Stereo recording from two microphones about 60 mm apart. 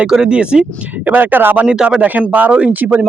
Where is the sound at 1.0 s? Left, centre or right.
Right.